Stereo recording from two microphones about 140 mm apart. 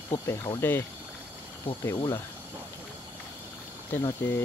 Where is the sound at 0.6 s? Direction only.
15° left (ahead or behind).